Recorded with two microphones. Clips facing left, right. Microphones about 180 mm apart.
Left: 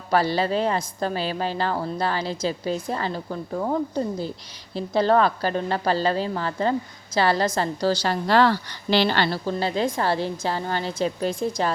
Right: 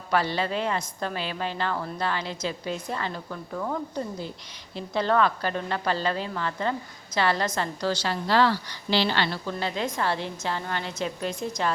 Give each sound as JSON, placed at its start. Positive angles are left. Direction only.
{"t": 0.1, "sound": "a woman's voice", "side_deg": 35}